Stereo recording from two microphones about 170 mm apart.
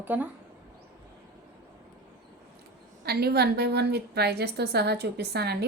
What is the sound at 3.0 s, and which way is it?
A woman's voice, 70° right (ahead or behind).